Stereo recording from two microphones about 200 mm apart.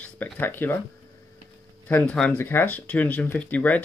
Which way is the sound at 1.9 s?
5° left (ahead or behind).